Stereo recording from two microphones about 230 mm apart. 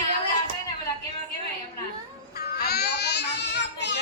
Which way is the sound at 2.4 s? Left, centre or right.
Left.